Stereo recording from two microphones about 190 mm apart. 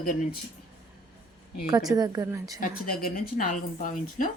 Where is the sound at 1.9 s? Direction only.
20° right (ahead or behind).